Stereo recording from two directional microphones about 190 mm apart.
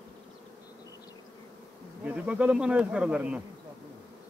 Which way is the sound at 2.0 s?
5° right (ahead or behind).